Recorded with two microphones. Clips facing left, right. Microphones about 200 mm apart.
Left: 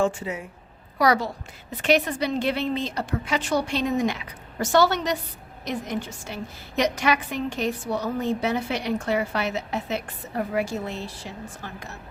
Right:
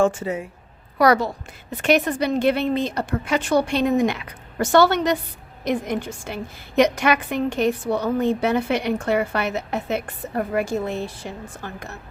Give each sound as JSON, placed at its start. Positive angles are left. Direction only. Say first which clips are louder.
{"t": 0.0, "sound": "speech", "louder": "right 4 dB", "side_deg": -45}
{"t": 0.9, "sound": "a woman's voice", "louder": "right 4 dB", "side_deg": -55}